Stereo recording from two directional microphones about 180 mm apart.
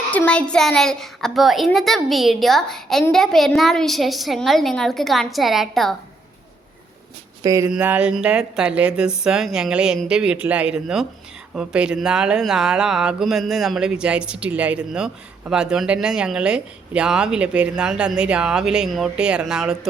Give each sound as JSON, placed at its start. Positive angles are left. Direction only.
{"t": 0.1, "sound": "speech", "side_deg": 10}
{"t": 7.4, "sound": "speech", "side_deg": -20}
{"t": 7.7, "sound": "speech", "side_deg": -5}